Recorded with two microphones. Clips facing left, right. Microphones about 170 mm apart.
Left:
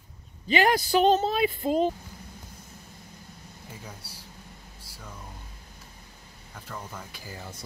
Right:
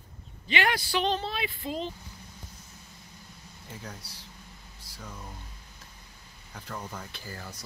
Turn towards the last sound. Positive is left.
turn(degrees=15)  # may be behind; listen again after turning